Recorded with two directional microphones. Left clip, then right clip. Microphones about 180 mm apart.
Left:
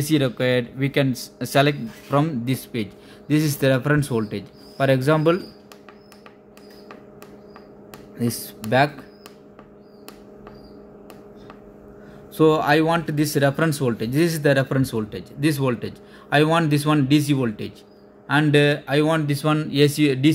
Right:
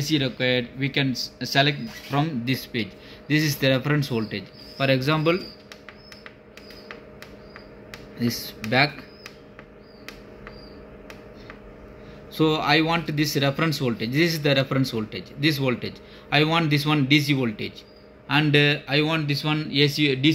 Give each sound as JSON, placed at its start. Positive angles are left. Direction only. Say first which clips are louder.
{"t": 0.0, "sound": "a man's voice", "louder": "left 3 dB", "side_deg": 50}
{"t": 8.2, "sound": "a man's voice", "louder": "left 1 dB", "side_deg": 40}
{"t": 12.4, "sound": "a man's voice", "louder": "left 4 dB", "side_deg": 35}